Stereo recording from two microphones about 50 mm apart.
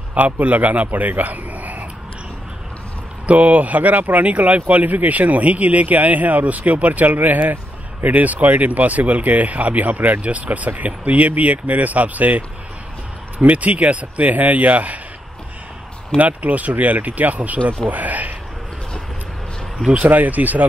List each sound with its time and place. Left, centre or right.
0.1 s a man's voice: right
3.3 s speech: right
16.2 s speech: right
19.9 s speech: right